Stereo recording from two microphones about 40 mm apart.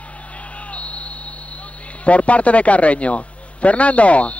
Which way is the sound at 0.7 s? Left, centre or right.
Left.